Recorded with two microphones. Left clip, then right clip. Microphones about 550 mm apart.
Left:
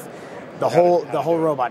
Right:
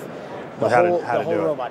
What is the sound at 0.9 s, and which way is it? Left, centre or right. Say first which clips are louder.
Speech: left 2 dB; left.